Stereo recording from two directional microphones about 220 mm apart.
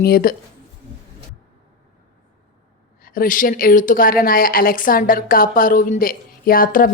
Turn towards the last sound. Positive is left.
turn(degrees=40)  # may be behind; listen again after turning